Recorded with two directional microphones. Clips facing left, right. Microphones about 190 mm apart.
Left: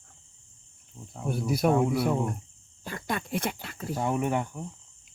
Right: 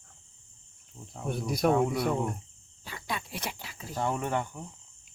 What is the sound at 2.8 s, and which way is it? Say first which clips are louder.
Speech: left 5 dB; 50° left (ahead or behind).